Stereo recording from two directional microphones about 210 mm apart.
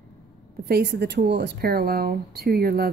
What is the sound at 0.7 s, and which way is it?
Speech, 50° right (ahead or behind).